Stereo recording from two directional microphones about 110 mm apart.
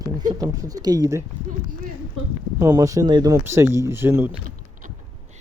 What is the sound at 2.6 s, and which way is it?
Speech, 30° right (ahead or behind).